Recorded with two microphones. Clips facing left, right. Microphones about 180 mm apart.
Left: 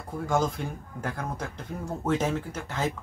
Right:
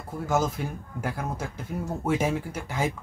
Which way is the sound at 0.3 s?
5° right (ahead or behind).